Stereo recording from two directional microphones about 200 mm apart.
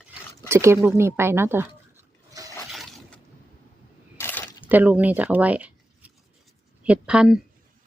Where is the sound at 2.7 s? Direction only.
Centre (ahead or behind).